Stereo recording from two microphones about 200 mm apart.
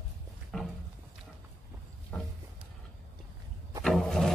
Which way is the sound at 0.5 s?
Centre (ahead or behind).